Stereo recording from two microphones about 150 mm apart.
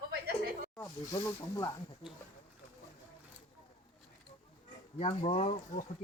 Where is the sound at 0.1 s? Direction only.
80° right.